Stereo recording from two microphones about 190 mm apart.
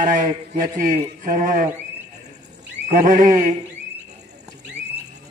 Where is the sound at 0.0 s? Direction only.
40° right (ahead or behind).